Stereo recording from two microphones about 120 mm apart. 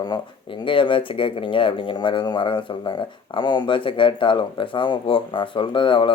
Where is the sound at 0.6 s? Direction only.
45° left (ahead or behind).